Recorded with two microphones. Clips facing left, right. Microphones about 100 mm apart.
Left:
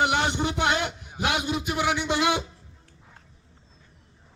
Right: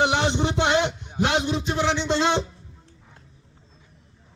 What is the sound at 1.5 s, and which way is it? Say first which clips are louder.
Music: right 2 dB; 10° left (ahead or behind).